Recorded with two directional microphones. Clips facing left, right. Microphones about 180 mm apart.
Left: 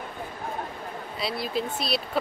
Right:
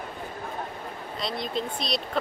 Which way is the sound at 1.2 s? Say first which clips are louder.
Left 1 dB; 5° left (ahead or behind).